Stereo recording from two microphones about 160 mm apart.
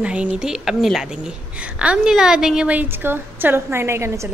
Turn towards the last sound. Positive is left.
turn(degrees=-20)  # may be behind; listen again after turning